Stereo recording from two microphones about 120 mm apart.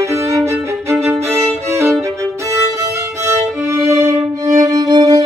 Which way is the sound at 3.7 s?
25° right (ahead or behind).